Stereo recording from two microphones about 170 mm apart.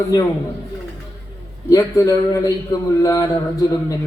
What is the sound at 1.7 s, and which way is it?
A man's voice, 20° left (ahead or behind).